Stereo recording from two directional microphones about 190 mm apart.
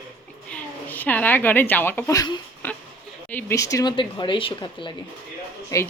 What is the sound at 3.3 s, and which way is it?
A woman's voice, 15° left (ahead or behind).